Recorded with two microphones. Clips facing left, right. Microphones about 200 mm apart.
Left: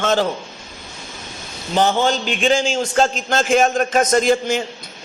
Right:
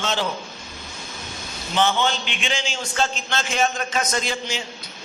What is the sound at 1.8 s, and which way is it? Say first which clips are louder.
A man's voice: left 4 dB; 45° left (ahead or behind).